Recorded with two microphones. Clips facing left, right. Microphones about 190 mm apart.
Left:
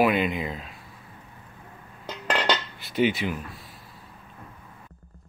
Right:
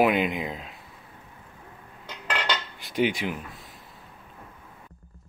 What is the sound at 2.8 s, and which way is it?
Speech, 15° right (ahead or behind).